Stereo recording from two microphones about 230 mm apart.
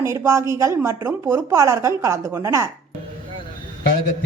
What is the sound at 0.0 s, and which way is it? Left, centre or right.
A woman's voice, centre.